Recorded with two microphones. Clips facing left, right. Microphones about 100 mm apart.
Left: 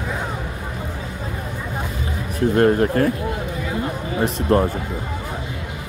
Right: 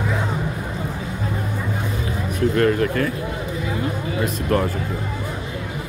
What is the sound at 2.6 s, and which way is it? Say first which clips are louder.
Speech: left 4 dB; 35° left (ahead or behind).